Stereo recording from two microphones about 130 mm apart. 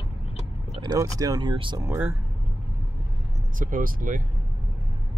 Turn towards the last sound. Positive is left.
turn(degrees=-90)